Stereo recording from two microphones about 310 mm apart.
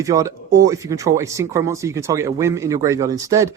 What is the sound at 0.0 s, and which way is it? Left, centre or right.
Speech, centre.